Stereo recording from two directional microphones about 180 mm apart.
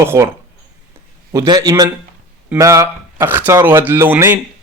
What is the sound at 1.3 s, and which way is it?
Speech, 20° right (ahead or behind).